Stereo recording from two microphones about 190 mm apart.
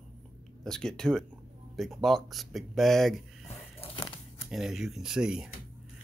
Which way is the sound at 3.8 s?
30° left (ahead or behind).